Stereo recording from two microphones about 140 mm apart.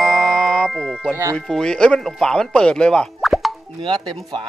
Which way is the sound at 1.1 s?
20° right (ahead or behind).